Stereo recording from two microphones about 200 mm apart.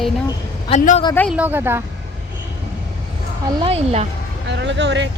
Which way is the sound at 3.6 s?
30° right (ahead or behind).